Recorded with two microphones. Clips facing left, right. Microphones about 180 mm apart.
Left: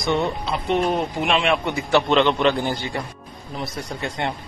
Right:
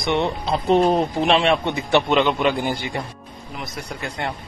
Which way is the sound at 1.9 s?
10° right (ahead or behind).